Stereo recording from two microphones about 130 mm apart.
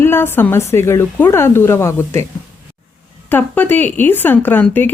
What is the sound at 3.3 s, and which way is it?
Speech, 15° left (ahead or behind).